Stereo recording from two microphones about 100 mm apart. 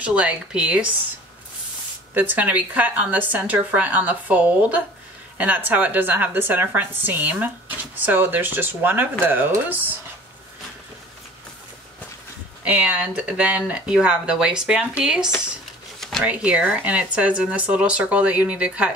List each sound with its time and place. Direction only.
0.0 s speech: 10° right (ahead or behind)
2.1 s a woman's voice: 15° right (ahead or behind)
12.6 s speech: 10° right (ahead or behind)
16.0 s zipper: centre (ahead or behind)
16.3 s speech: 10° right (ahead or behind)